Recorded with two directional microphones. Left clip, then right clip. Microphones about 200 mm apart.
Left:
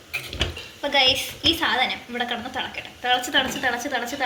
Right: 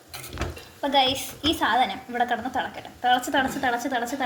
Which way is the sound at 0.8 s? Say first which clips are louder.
Left 2 dB; 45° right (ahead or behind).